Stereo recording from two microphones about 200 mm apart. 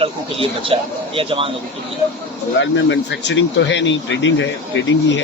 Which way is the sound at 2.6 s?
65° left (ahead or behind).